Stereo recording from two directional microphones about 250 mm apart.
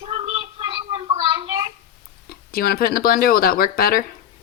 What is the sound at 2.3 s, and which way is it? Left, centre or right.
Speech, left.